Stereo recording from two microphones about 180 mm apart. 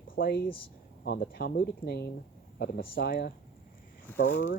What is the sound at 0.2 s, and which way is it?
Speech, 55° left (ahead or behind).